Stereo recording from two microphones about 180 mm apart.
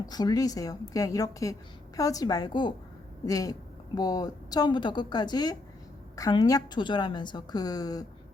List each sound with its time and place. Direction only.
0.0 s a woman's voice: 20° left (ahead or behind)